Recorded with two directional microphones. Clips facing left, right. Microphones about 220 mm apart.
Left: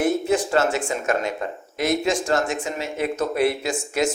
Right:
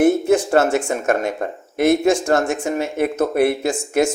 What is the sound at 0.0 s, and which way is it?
Speech, 50° right (ahead or behind).